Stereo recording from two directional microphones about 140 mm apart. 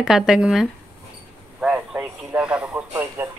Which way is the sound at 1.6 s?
5° right (ahead or behind).